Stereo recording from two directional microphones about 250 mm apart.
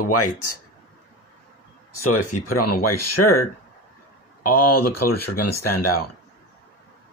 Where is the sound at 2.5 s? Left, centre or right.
Left.